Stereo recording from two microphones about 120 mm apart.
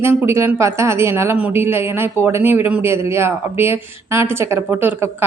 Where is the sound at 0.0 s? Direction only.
20° right (ahead or behind).